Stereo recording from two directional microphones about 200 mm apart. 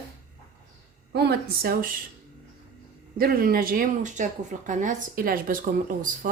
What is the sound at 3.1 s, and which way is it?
Speech, 50° right (ahead or behind).